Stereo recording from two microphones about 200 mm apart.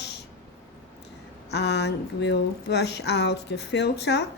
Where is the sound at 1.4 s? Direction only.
55° left (ahead or behind).